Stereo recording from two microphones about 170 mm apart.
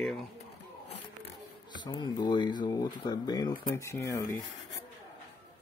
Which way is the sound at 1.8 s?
25° left (ahead or behind).